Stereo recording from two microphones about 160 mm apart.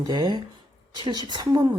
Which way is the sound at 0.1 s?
25° right (ahead or behind).